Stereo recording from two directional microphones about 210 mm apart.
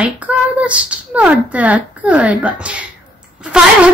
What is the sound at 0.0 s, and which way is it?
A woman's voice, 5° right (ahead or behind).